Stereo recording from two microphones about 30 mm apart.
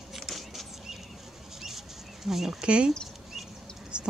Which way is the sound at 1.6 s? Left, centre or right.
Centre.